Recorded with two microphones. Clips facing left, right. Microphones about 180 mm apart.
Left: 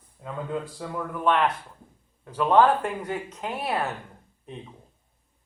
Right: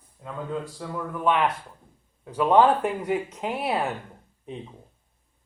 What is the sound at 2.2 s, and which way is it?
Speech, 15° right (ahead or behind).